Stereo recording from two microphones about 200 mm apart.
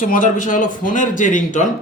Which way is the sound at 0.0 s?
40° left (ahead or behind).